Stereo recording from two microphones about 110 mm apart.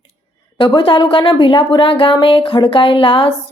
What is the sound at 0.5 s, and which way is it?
A woman's voice, 50° left (ahead or behind).